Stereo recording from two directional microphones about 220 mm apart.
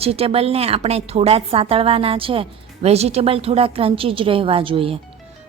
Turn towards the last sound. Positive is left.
turn(degrees=-25)  # may be behind; listen again after turning